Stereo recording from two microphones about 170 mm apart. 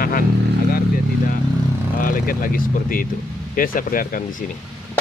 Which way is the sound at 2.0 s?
55° left (ahead or behind).